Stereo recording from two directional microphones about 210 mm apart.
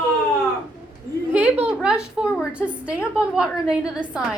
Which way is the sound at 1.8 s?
5° right (ahead or behind).